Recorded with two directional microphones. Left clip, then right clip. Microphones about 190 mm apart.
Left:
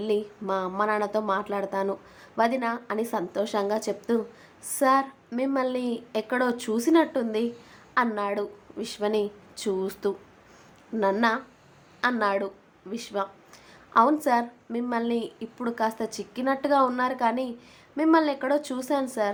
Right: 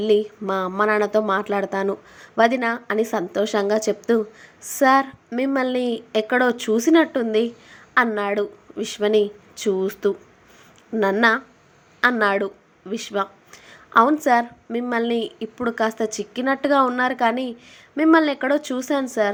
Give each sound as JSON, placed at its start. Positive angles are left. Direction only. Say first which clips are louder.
{"t": 0.0, "sound": "a woman's voice", "louder": "right 8 dB", "side_deg": -20}